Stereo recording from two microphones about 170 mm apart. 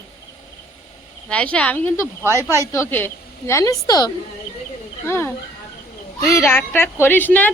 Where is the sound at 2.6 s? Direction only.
15° left (ahead or behind).